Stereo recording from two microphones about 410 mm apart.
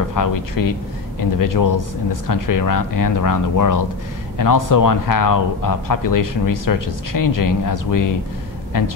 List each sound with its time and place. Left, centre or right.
0.1 s speech: left